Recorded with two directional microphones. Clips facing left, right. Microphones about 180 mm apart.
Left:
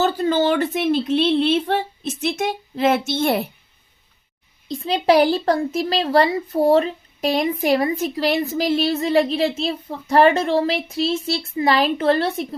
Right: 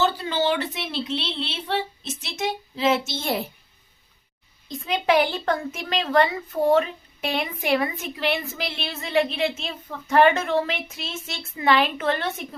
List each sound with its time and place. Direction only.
0.0 s a woman's voice: 45° left (ahead or behind)
4.7 s a woman's voice: 35° left (ahead or behind)